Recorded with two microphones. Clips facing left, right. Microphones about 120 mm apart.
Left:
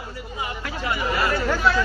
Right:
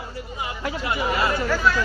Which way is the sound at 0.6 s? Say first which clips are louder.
Right 2 dB; 25° right (ahead or behind).